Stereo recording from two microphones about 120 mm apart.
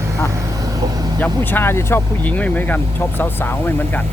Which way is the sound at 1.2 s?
15° left (ahead or behind).